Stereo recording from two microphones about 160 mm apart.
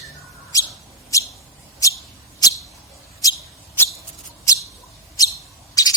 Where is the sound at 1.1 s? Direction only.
20° left (ahead or behind).